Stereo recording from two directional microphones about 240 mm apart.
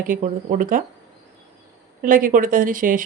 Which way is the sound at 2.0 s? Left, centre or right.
Right.